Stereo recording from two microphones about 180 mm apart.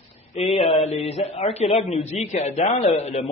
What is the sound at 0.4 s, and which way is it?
A man's voice, 30° left (ahead or behind).